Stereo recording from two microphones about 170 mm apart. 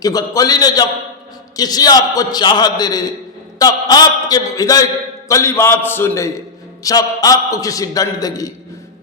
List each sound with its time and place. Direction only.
0.0 s a man's voice: 20° left (ahead or behind)